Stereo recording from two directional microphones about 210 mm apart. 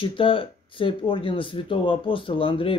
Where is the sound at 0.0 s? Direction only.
25° left (ahead or behind).